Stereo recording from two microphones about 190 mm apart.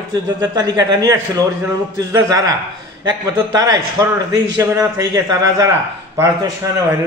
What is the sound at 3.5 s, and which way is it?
A man's voice, 20° right (ahead or behind).